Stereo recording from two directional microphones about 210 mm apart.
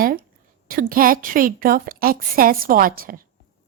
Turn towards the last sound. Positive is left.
turn(degrees=-45)  # may be behind; listen again after turning